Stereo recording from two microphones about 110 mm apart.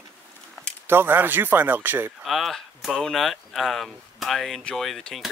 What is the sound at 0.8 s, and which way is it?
Speech, 20° right (ahead or behind).